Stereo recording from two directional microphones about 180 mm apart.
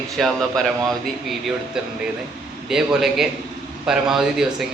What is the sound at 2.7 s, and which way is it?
A man's voice, 5° right (ahead or behind).